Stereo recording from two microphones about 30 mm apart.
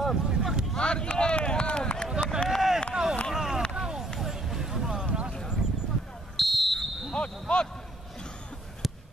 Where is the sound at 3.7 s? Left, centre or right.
Right.